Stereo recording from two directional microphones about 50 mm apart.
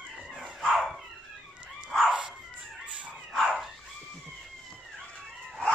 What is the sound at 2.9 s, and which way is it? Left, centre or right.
Dog, right.